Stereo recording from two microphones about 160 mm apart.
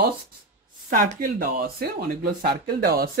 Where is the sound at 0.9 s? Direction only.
55° right (ahead or behind); by 3.1 s 75° right (ahead or behind).